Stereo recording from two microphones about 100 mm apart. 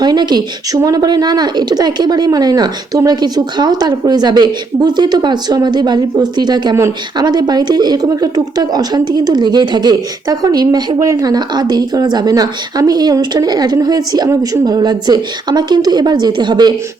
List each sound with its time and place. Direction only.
0.0 s a woman's voice: 45° right (ahead or behind)